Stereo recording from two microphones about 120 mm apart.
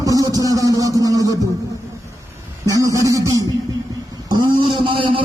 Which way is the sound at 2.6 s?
30° right (ahead or behind).